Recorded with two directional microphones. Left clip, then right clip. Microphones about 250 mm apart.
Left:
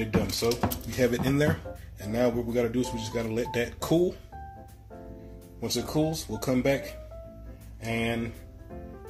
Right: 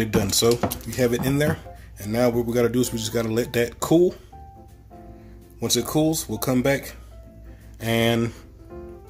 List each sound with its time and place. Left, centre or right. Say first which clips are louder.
0.0 s speech: right 7 dB; right
0.8 s speech: right 3 dB; right
5.6 s speech: right 6 dB; right
7.8 s speech: right 9 dB; right